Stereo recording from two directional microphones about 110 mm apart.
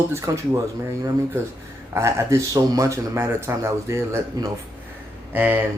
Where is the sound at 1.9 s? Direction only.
25° right (ahead or behind).